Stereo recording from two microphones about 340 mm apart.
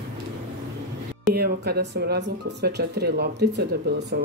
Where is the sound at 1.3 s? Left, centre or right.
Right.